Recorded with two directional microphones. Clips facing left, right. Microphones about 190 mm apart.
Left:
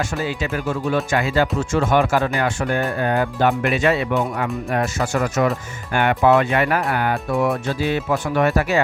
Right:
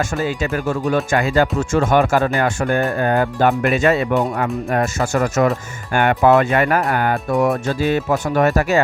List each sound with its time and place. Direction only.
0.2 s speech: 45° right (ahead or behind)